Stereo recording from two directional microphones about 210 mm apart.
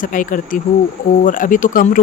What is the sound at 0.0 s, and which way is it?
Speech, 40° left (ahead or behind).